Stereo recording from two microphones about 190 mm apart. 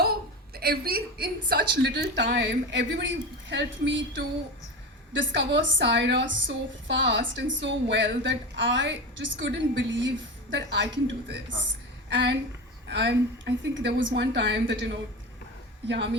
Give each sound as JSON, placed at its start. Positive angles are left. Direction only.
{"t": 0.0, "sound": "a woman's voice", "side_deg": -55}